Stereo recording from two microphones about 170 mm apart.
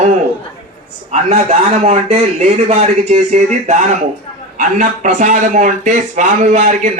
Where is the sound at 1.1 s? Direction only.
45° right (ahead or behind).